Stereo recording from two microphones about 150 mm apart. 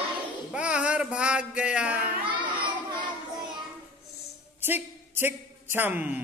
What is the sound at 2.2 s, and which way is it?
Child singing, 30° right (ahead or behind).